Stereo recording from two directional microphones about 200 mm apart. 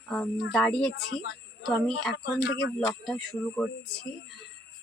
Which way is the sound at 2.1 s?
60° left (ahead or behind).